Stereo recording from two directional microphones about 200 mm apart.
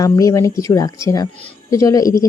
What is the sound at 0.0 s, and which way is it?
Speech, 15° left (ahead or behind).